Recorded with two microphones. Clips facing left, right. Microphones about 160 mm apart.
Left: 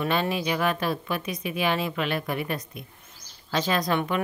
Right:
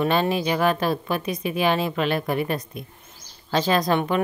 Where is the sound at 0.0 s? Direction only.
35° right (ahead or behind).